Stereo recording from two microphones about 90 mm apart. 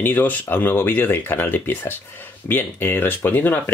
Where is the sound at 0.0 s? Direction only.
20° left (ahead or behind).